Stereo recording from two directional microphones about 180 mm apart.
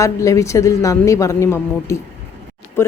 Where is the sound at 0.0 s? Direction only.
15° left (ahead or behind).